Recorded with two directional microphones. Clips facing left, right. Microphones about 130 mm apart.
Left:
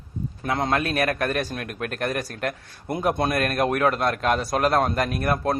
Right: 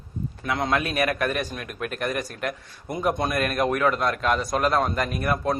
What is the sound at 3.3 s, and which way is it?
A man's voice, 45° left (ahead or behind).